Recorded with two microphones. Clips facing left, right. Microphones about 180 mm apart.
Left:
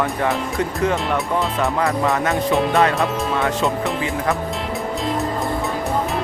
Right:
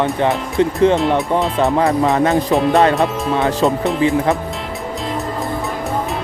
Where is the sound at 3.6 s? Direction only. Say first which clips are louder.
Right 8 dB; 35° right (ahead or behind).